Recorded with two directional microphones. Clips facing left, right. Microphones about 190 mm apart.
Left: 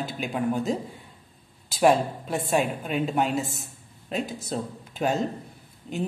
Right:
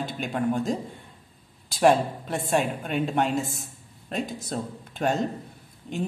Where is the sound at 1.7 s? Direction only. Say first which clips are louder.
Even; centre (ahead or behind).